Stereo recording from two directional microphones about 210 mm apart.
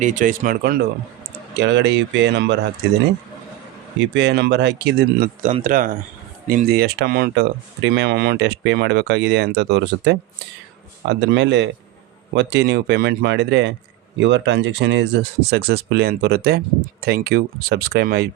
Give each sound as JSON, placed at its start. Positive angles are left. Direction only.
{"t": 0.0, "sound": "speech", "side_deg": -35}
{"t": 4.0, "sound": "speech", "side_deg": -55}